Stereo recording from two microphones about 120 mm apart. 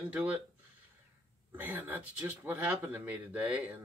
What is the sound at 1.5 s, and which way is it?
Speech, 15° right (ahead or behind).